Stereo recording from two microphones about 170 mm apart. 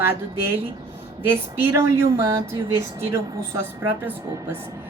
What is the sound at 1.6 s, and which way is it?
Speech, 15° right (ahead or behind).